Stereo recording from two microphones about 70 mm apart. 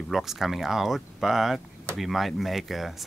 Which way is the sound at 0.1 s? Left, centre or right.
Centre.